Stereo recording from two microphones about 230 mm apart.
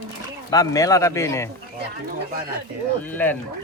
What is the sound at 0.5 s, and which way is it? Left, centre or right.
Speech, centre.